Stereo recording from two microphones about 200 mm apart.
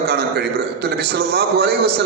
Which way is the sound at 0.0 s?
55° right (ahead or behind).